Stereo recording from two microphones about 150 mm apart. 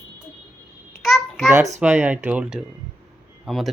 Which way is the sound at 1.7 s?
10° right (ahead or behind).